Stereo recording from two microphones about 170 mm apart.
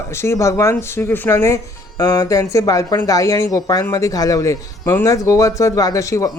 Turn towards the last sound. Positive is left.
turn(degrees=20)  # may be behind; listen again after turning